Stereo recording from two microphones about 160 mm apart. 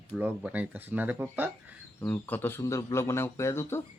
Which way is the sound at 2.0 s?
10° left (ahead or behind).